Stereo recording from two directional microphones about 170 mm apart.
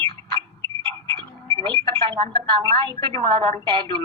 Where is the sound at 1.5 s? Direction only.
30° right (ahead or behind).